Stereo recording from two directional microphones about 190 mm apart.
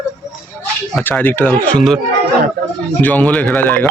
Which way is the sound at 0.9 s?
10° left (ahead or behind).